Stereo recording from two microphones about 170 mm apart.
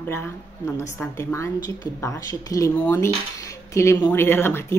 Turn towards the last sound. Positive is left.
turn(degrees=15)  # may be behind; listen again after turning